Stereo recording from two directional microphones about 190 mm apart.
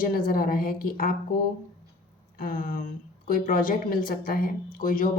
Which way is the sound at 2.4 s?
50° left (ahead or behind).